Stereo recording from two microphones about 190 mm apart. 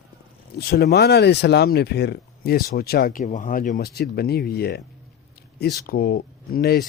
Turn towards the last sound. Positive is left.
turn(degrees=55)  # may be behind; listen again after turning